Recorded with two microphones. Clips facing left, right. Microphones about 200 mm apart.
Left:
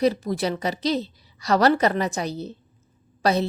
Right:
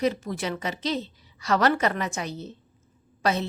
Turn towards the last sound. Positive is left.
turn(degrees=35)  # may be behind; listen again after turning